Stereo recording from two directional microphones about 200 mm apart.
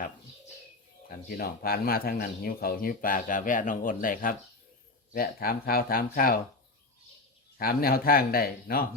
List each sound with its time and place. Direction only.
1.0 s speech: 45° left (ahead or behind)
7.6 s speech: 50° left (ahead or behind)